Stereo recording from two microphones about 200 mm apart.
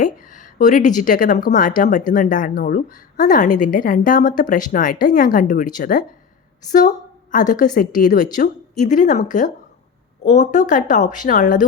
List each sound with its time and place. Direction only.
0.0 s a woman's voice: 40° left (ahead or behind)